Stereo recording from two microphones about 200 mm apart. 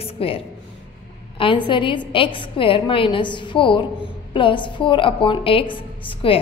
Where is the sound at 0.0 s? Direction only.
30° left (ahead or behind).